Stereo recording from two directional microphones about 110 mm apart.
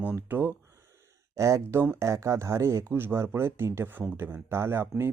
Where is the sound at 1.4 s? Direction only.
25° right (ahead or behind).